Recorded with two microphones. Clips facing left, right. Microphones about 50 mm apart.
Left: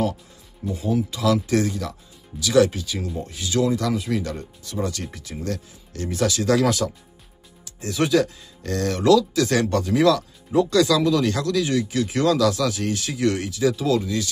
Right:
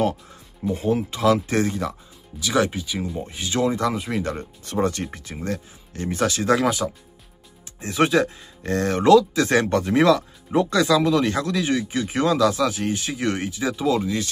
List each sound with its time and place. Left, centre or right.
0.7 s speech: right